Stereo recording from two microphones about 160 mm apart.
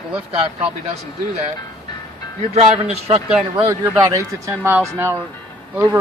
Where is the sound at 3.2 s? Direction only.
5° right (ahead or behind).